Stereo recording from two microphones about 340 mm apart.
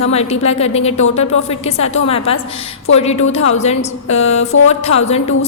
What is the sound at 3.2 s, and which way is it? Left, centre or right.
Speech, left.